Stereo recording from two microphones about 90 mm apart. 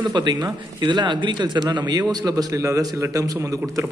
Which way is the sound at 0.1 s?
55° right (ahead or behind).